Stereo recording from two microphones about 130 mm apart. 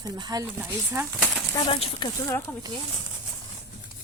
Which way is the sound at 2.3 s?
25° left (ahead or behind).